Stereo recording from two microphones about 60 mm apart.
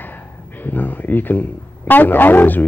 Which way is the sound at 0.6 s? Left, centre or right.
Left.